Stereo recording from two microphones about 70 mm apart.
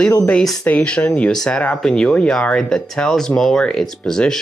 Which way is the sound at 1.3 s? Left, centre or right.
Centre.